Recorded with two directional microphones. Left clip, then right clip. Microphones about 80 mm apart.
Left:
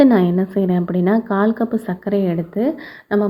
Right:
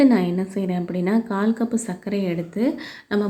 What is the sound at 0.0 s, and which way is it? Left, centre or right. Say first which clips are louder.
A woman's voice: left 5 dB; left.